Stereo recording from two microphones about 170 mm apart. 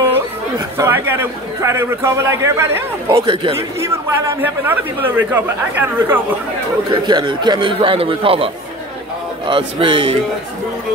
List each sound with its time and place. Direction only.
0.7 s a man's voice: 15° right (ahead or behind)
3.2 s a man's voice: 30° right (ahead or behind)
4.4 s a man's voice: 10° right (ahead or behind)
6.9 s a man's voice: 25° right (ahead or behind)
9.5 s a man's voice: 30° right (ahead or behind)